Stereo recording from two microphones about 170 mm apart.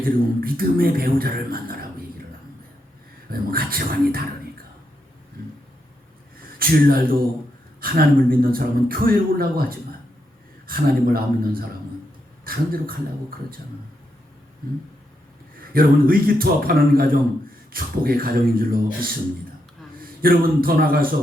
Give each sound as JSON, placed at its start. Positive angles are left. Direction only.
{"t": 0.0, "sound": "speech", "side_deg": -60}
{"t": 3.2, "sound": "speech", "side_deg": -60}
{"t": 6.6, "sound": "speech", "side_deg": -60}
{"t": 15.7, "sound": "speech", "side_deg": -60}
{"t": 20.0, "sound": "a man's voice", "side_deg": -60}